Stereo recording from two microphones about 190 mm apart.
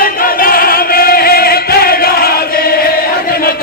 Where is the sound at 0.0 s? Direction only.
50° left (ahead or behind).